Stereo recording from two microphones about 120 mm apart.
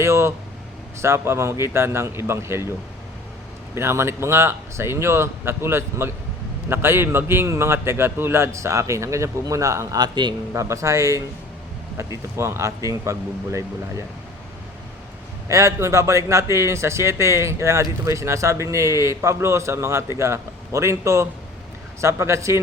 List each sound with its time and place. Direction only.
0.0 s a man's voice: 20° right (ahead or behind)
3.8 s a man's voice: 20° right (ahead or behind); by 10.3 s 35° right (ahead or behind)
10.5 s a man's voice: 25° right (ahead or behind)
12.4 s a man's voice: 25° right (ahead or behind)
15.4 s a man's voice: 25° right (ahead or behind)